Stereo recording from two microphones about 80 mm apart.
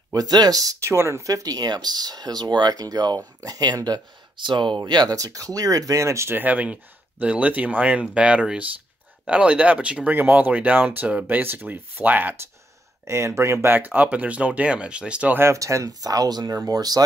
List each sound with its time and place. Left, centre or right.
0.1 s speech: right
0.7 s speech: right
3.2 s speech: right
5.1 s speech: right
6.3 s speech: centre
13.0 s speech: right; by 15.3 s centre
15.3 s speech: right
16.4 s speech: right